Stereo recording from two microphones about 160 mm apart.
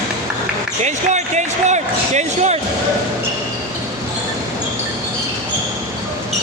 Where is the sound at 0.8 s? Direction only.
45° right (ahead or behind).